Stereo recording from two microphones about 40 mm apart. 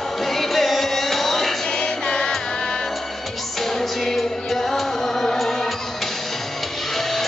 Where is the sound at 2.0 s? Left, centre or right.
Left.